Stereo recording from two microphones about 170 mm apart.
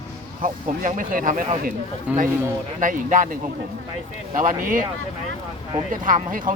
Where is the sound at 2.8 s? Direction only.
50° right (ahead or behind).